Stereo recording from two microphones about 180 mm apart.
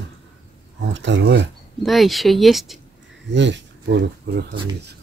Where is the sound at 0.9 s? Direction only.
90° right.